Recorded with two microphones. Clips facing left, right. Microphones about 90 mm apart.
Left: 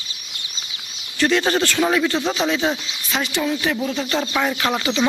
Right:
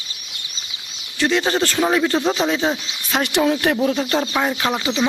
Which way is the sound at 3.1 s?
60° right (ahead or behind).